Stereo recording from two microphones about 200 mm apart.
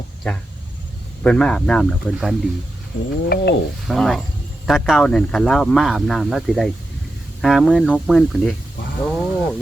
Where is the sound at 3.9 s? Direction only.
Centre (ahead or behind).